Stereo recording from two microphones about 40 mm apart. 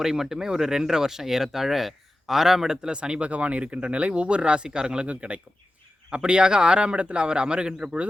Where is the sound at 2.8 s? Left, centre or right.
Right.